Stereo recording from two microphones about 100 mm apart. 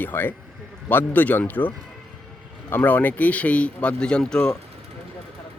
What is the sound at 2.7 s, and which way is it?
Speech, 20° left (ahead or behind).